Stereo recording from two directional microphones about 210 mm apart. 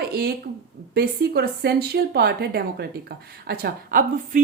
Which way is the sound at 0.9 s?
50° right (ahead or behind).